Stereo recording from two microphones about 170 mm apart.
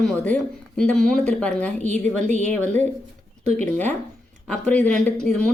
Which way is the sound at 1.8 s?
45° right (ahead or behind).